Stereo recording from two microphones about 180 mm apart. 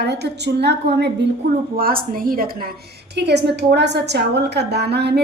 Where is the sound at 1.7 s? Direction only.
55° right (ahead or behind).